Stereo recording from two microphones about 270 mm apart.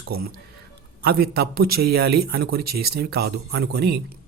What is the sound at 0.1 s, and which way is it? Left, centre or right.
A man's voice, right.